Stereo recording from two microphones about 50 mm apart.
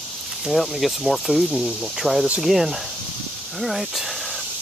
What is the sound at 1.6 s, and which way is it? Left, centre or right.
Speech, centre.